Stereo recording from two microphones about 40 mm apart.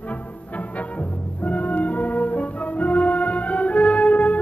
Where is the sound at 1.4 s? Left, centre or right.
Left.